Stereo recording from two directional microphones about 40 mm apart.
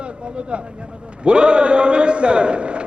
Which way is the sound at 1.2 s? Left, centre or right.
Right.